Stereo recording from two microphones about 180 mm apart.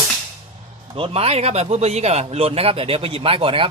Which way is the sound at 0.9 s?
30° right (ahead or behind).